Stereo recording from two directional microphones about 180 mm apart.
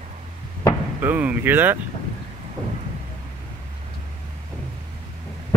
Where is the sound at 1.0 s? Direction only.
10° right (ahead or behind).